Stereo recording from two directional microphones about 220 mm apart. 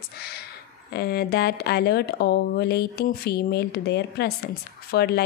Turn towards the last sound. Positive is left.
turn(degrees=45)  # may be behind; listen again after turning